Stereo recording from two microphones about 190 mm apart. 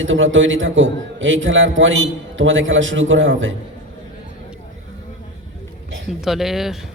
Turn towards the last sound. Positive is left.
turn(degrees=0)  # may be behind; listen again after turning